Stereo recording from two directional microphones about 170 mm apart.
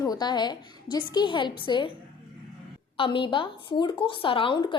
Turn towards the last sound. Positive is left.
turn(degrees=30)  # may be behind; listen again after turning